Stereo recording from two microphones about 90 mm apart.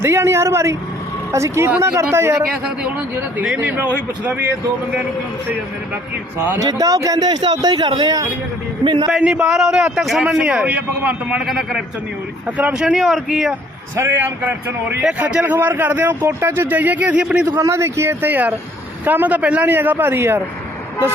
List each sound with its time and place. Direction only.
0.0 s speech: 30° right (ahead or behind)
3.6 s speech: 20° right (ahead or behind)
6.6 s a man's voice: 45° right (ahead or behind)
8.8 s a man's voice: 70° right (ahead or behind)
9.0 s a man's voice: 10° right (ahead or behind)
11.4 s a man's voice: centre (ahead or behind)
12.5 s a man's voice: 15° right (ahead or behind)
13.9 s a man's voice: 25° right (ahead or behind)
17.6 s speech: 30° right (ahead or behind)